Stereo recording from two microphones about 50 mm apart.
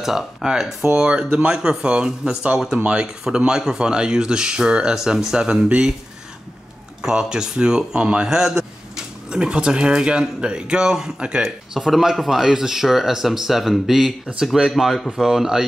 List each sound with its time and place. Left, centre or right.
0.0 s speech: centre
7.0 s speech: centre
11.4 s speech: centre